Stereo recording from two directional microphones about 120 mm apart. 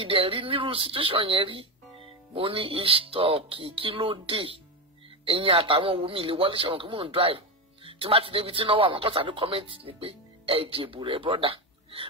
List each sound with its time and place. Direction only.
0.0 s a man's voice: 50° right (ahead or behind)